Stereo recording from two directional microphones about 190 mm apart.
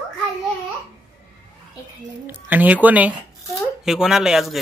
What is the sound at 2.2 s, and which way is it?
Speech, 10° right (ahead or behind).